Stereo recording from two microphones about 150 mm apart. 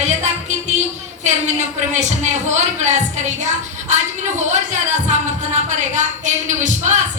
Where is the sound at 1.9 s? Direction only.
50° right (ahead or behind).